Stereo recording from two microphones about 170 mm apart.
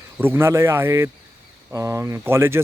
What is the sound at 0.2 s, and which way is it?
A man's voice, 15° right (ahead or behind).